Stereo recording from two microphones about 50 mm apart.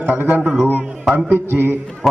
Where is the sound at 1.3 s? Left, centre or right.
Right.